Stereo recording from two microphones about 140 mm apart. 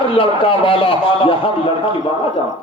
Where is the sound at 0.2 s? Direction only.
40° left (ahead or behind).